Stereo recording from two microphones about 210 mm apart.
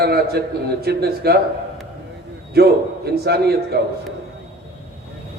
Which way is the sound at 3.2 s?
50° right (ahead or behind).